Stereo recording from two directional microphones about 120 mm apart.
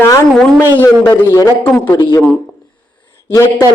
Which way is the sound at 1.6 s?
15° left (ahead or behind).